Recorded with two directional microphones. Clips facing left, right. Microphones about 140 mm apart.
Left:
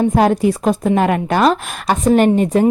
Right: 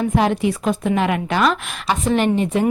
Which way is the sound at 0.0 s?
40° left (ahead or behind).